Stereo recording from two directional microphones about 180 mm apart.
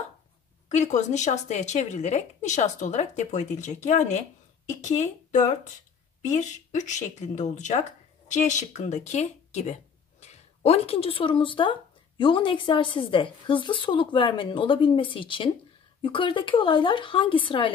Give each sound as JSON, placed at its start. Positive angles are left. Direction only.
{"t": 0.7, "sound": "speech", "side_deg": 40}